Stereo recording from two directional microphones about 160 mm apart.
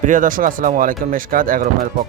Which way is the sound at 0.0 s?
55° right (ahead or behind).